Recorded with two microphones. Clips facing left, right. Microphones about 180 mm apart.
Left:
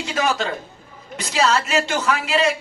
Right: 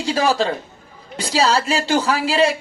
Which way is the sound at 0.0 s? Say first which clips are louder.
Right 4 dB; 35° right (ahead or behind).